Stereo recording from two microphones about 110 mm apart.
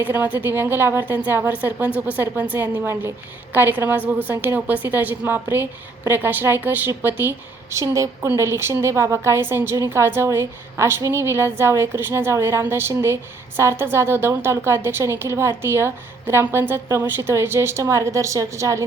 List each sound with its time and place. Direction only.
0.0 s a woman's voice: 15° right (ahead or behind)